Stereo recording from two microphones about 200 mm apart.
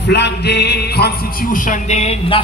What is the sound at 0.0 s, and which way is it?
A man's voice, 55° left (ahead or behind).